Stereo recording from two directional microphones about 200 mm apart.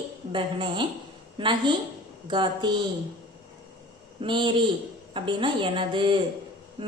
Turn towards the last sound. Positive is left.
turn(degrees=-25)  # may be behind; listen again after turning